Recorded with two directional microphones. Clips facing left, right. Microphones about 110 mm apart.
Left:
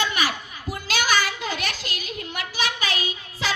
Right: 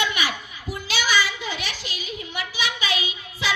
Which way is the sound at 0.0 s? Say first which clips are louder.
Left 1 dB; 40° left (ahead or behind).